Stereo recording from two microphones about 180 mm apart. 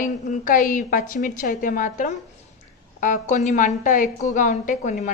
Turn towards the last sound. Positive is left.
turn(degrees=45)  # may be behind; listen again after turning